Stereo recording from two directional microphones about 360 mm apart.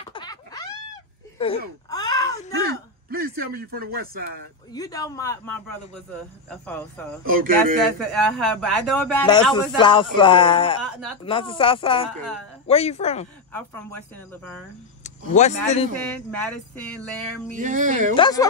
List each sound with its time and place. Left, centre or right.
0.1 s a sound: centre
2.6 s speech: right
4.7 s a man's voice: centre
7.2 s speech: right
8.1 s a man's voice: centre
13.5 s speech: centre
13.9 s speech: right
15.0 s speech: centre
16.3 s speech: centre
17.5 s speech: right
18.1 s a man's voice: centre